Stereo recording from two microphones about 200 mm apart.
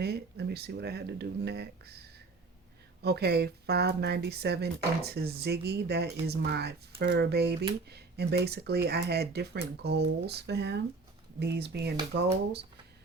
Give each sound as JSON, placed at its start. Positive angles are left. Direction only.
{"t": 0.0, "sound": "speech", "side_deg": -55}
{"t": 3.0, "sound": "speech", "side_deg": -55}